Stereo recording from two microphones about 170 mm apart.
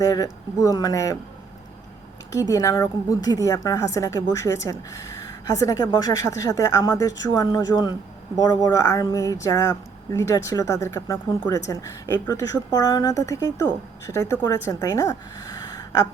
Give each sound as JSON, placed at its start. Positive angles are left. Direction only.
{"t": 0.0, "sound": "a woman's voice", "side_deg": 20}
{"t": 2.3, "sound": "a woman's voice", "side_deg": 20}